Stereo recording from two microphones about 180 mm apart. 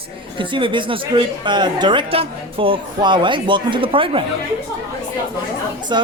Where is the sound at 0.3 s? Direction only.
25° right (ahead or behind).